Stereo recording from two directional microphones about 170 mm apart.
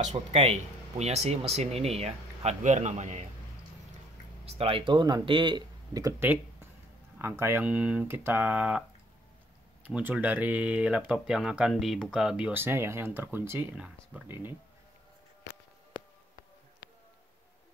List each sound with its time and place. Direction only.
0.0 s speech: 40° right (ahead or behind)
4.5 s speech: 35° right (ahead or behind); by 8.8 s 5° right (ahead or behind)
9.8 s speech: 10° right (ahead or behind)